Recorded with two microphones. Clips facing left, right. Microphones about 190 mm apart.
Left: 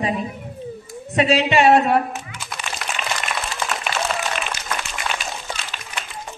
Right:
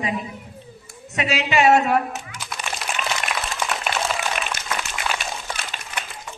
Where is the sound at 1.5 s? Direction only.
Centre (ahead or behind).